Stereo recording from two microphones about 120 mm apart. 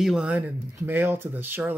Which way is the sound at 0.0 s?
5° right (ahead or behind).